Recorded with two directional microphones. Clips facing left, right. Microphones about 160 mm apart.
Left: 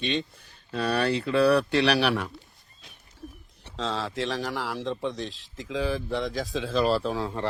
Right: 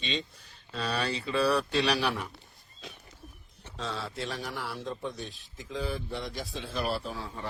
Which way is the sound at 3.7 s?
90° left.